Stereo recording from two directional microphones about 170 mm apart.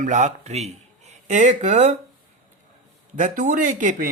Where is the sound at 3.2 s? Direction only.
50° right (ahead or behind).